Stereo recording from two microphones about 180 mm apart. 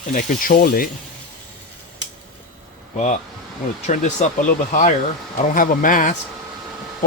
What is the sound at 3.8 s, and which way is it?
Speech, 40° left (ahead or behind).